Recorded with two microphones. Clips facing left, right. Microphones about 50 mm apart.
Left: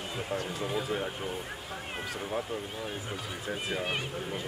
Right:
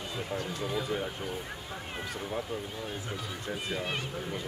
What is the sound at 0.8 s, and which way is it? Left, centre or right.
Speech, centre.